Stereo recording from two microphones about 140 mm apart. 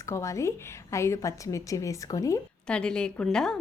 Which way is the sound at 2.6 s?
5° left (ahead or behind).